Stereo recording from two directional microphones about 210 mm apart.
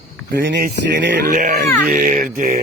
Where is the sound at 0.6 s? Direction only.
50° right (ahead or behind).